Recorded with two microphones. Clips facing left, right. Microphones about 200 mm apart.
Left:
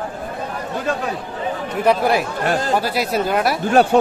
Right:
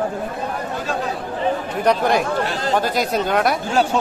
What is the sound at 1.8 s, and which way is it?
Speech, 5° left (ahead or behind).